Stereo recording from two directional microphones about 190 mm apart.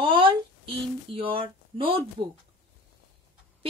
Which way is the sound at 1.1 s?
25° right (ahead or behind).